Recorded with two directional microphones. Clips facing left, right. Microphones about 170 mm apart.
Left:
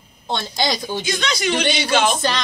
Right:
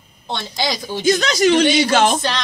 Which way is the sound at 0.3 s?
Centre (ahead or behind).